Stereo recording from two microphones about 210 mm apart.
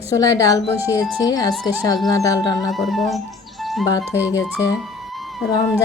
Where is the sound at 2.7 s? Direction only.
Centre (ahead or behind).